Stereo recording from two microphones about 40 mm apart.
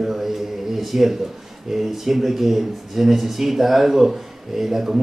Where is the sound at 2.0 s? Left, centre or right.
Centre.